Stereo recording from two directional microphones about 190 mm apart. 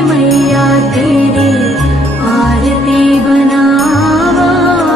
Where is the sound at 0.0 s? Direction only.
Centre (ahead or behind).